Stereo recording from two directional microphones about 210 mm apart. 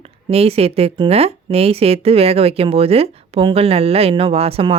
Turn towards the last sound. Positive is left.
turn(degrees=-25)  # may be behind; listen again after turning